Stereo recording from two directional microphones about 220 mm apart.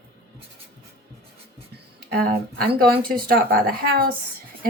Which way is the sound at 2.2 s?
45° right (ahead or behind).